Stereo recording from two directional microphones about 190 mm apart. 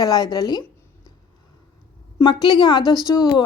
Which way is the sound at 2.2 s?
25° left (ahead or behind).